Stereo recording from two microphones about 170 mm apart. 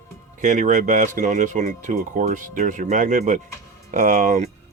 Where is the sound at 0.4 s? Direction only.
45° right (ahead or behind).